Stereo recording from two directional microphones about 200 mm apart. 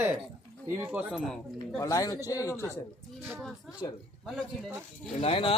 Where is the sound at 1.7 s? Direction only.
15° left (ahead or behind).